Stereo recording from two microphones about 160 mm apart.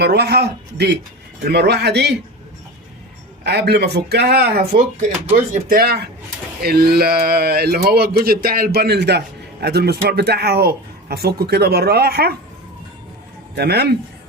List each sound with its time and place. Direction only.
0.0 s speech: 90° right
3.4 s speech: 90° right
13.6 s speech: 90° right